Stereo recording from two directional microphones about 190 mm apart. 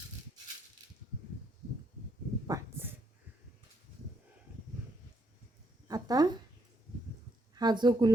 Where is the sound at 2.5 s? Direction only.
15° right (ahead or behind).